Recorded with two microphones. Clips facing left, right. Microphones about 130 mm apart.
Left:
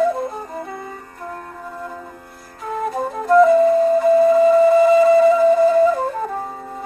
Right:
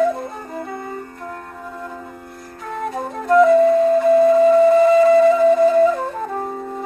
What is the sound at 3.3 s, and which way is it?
Flute, centre (ahead or behind).